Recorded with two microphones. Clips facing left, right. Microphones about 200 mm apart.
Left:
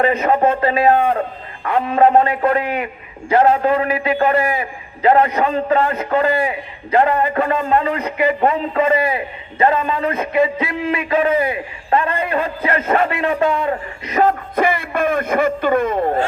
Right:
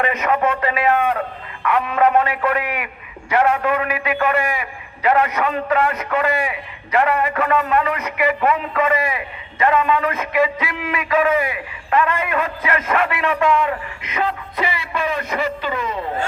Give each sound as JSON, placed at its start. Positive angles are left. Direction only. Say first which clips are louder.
{"t": 0.0, "sound": "a man's voice", "louder": "left 4 dB", "side_deg": 30}